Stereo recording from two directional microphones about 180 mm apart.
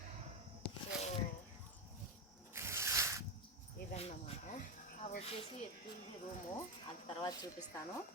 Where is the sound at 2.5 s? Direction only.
15° right (ahead or behind).